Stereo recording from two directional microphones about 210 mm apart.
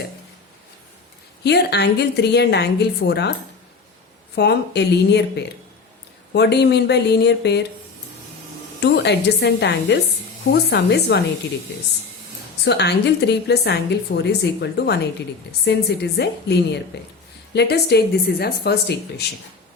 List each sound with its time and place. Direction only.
1.5 s a woman's voice: 50° left (ahead or behind)
4.4 s a woman's voice: 55° left (ahead or behind)
6.3 s a woman's voice: 55° left (ahead or behind)
8.8 s a woman's voice: 55° left (ahead or behind)
12.6 s a woman's voice: 55° left (ahead or behind)